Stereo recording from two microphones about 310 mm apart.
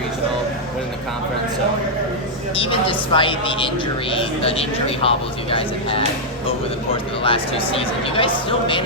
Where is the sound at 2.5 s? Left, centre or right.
Centre.